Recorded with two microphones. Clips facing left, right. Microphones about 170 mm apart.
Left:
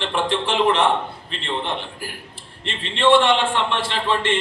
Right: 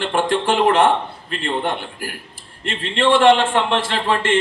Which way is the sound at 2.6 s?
50° right (ahead or behind).